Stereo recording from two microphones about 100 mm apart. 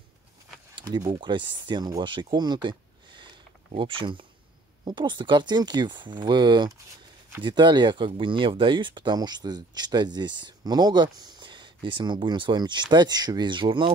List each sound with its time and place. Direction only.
0.7 s speech: 45° right (ahead or behind)
3.2 s a sound: 55° right (ahead or behind)
4.8 s speech: 50° right (ahead or behind)